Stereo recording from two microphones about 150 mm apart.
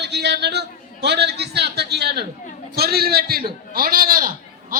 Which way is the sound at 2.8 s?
90° right.